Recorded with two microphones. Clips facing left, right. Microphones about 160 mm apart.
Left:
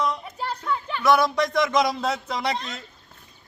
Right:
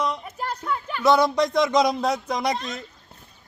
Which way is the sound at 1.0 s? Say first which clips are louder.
Right 2 dB; 20° right (ahead or behind).